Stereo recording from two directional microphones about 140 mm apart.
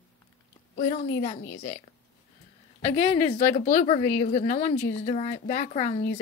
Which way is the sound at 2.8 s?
45° left (ahead or behind).